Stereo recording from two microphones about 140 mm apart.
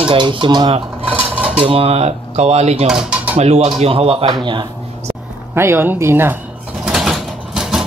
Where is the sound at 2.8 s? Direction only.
5° right (ahead or behind).